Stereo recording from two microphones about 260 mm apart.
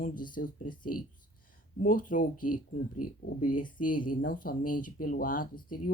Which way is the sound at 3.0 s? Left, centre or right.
Left.